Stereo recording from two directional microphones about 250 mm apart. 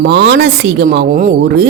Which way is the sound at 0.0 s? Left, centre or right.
Right.